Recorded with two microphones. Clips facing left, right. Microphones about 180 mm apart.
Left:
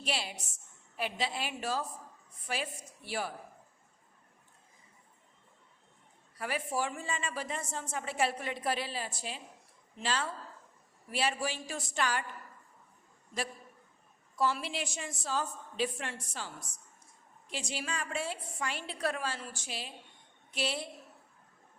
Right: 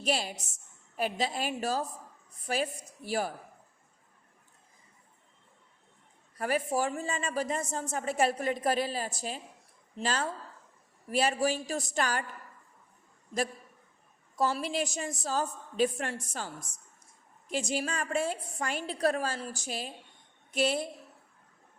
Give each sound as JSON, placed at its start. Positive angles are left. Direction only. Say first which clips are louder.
{"t": 0.0, "sound": "a woman's voice", "louder": "right 6 dB", "side_deg": -45}
{"t": 6.4, "sound": "a woman's voice", "louder": "right 5 dB", "side_deg": -45}
{"t": 14.3, "sound": "a woman's voice", "louder": "right 3 dB", "side_deg": -40}